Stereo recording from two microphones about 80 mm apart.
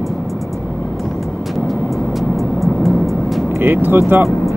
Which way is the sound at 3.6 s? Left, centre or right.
Right.